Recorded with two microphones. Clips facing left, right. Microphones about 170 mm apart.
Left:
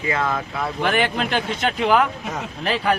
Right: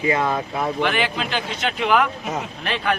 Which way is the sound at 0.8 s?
45° left (ahead or behind).